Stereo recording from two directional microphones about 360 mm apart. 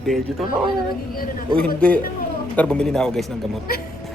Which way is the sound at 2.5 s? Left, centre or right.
Centre.